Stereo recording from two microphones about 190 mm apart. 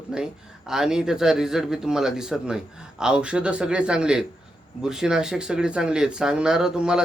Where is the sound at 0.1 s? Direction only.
5° right (ahead or behind).